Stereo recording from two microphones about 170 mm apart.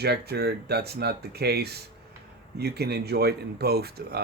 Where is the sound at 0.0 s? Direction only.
70° right (ahead or behind).